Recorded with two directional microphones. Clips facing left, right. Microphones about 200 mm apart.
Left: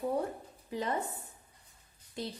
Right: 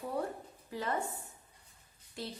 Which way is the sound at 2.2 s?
20° left (ahead or behind).